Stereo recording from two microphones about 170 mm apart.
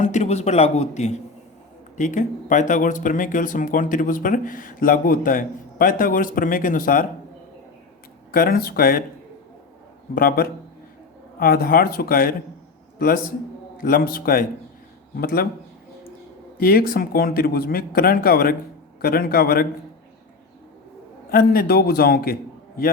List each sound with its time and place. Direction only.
0.0 s speech: 40° left (ahead or behind)
8.3 s speech: 60° left (ahead or behind)
10.2 s speech: 60° left (ahead or behind)
13.7 s speech: 55° left (ahead or behind)
16.6 s speech: 60° left (ahead or behind)
21.2 s speech: 60° left (ahead or behind)